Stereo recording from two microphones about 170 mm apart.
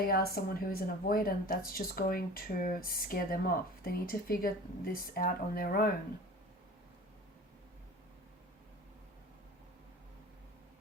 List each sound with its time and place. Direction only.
0.0 s speech: 65° left (ahead or behind)